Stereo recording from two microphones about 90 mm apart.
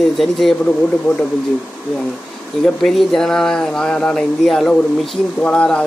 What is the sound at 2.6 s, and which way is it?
Speech, 5° left (ahead or behind).